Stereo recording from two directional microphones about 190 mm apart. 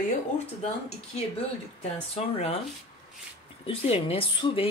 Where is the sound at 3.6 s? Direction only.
30° left (ahead or behind).